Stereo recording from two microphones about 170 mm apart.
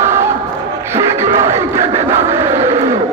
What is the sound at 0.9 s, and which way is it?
Music, 15° right (ahead or behind).